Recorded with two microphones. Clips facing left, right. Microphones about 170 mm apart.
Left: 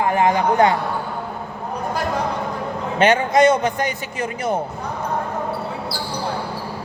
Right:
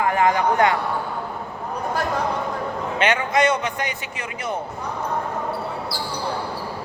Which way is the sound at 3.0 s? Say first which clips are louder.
Left 5 dB; 40° left (ahead or behind).